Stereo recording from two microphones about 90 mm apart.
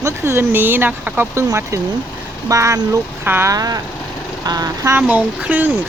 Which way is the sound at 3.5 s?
40° right (ahead or behind).